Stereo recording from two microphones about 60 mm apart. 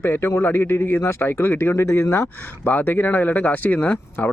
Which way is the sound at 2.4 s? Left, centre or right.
Left.